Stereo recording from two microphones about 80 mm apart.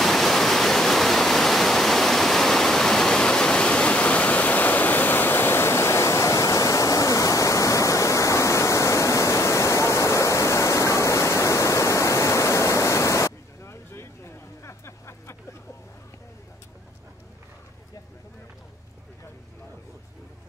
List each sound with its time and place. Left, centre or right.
0.0 s waterfall: centre; by 15.3 s left